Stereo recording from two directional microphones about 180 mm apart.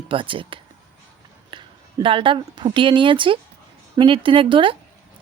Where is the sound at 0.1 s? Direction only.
30° right (ahead or behind).